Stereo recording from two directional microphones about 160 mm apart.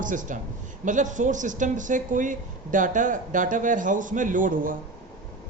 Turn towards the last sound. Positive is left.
turn(degrees=-60)  # may be behind; listen again after turning